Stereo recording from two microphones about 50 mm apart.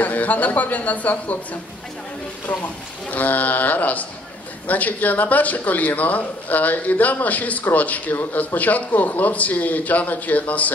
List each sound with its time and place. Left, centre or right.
0.0 s a man's voice: left
3.1 s a man's voice: left